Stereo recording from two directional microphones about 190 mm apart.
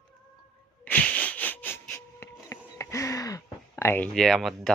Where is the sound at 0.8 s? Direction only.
10° left (ahead or behind).